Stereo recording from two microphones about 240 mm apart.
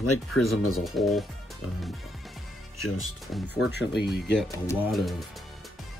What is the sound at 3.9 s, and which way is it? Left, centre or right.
Speech, left.